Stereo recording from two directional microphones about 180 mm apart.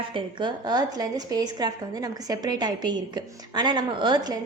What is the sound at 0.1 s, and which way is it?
Speech, 25° right (ahead or behind).